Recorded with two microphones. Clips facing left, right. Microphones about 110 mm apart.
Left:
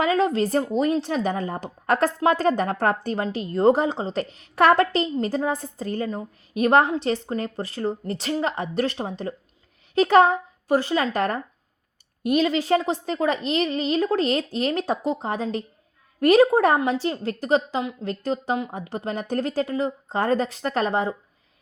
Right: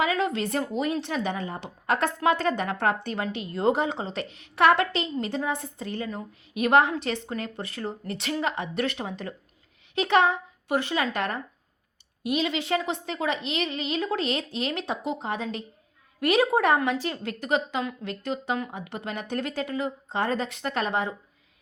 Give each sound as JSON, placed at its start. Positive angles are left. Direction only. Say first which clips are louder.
{"t": 0.0, "sound": "a woman's voice", "louder": "left 5 dB", "side_deg": 35}